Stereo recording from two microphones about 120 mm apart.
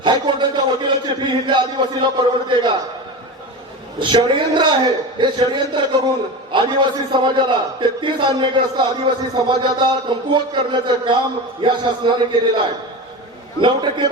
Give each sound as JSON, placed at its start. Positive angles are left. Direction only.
{"t": 0.0, "sound": "a man's voice", "side_deg": -40}
{"t": 4.0, "sound": "a man's voice", "side_deg": -40}